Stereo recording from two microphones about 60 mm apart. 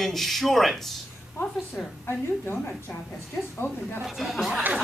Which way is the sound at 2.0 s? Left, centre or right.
Left.